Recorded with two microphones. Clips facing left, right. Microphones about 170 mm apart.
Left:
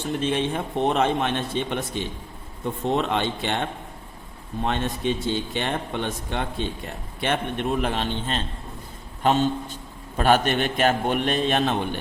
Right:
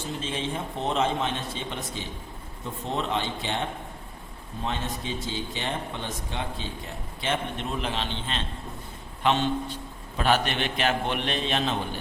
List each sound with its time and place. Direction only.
0.1 s a man's voice: 60° left (ahead or behind)
4.6 s a man's voice: 60° left (ahead or behind)